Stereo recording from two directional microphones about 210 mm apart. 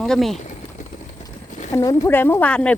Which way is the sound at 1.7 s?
15° left (ahead or behind).